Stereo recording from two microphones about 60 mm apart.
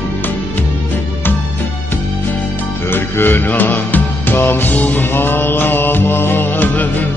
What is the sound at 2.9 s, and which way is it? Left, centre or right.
Music, left.